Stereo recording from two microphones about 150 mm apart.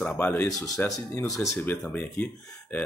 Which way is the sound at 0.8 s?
25° left (ahead or behind).